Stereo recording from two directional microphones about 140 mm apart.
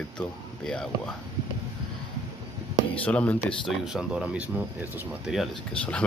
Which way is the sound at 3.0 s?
10° left (ahead or behind).